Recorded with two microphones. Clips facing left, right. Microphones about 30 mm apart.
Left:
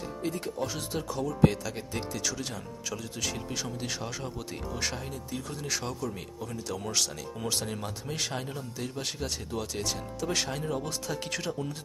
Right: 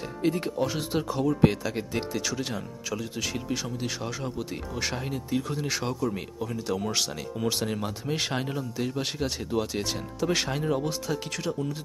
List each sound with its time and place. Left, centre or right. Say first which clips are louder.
0.2 s speech: right 7 dB; right; by 5.0 s centre
5.0 s speech: right 7 dB; right
11.3 s speech: right 3 dB; centre